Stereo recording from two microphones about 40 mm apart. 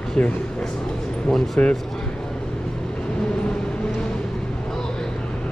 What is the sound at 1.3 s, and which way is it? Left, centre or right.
Speech, centre.